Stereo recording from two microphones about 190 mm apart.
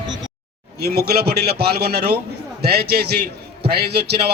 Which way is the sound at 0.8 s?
55° right (ahead or behind).